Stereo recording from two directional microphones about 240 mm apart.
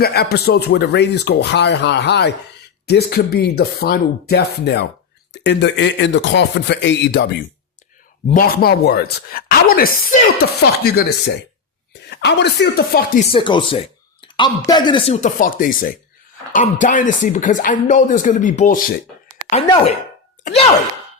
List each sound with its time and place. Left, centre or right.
0.0 s speech: left
8.3 s speech: left
12.1 s speech: left
13.3 s speech: centre